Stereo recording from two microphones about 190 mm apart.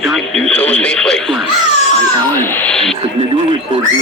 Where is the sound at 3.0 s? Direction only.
30° right (ahead or behind).